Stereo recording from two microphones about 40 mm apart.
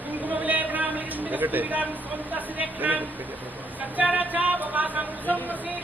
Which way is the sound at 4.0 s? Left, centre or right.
Right.